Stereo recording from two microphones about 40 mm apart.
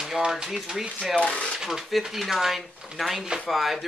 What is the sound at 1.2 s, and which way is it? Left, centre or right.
Speech, left.